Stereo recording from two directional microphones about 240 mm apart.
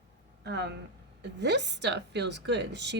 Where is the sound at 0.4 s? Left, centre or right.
Right.